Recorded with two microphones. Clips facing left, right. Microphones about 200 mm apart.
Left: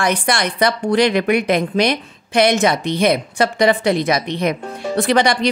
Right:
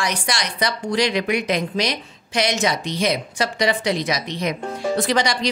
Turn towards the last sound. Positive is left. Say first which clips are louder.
# left 5 dB
turn(degrees=55)  # may be behind; listen again after turning